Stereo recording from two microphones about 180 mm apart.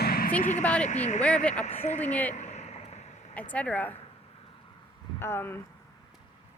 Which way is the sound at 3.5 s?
10° left (ahead or behind).